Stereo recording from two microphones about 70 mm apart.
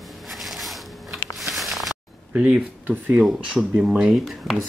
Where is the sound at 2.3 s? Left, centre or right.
Centre.